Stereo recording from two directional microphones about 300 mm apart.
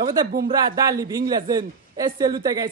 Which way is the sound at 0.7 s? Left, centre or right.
Centre.